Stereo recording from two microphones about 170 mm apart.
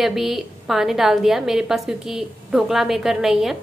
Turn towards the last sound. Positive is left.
turn(degrees=0)  # may be behind; listen again after turning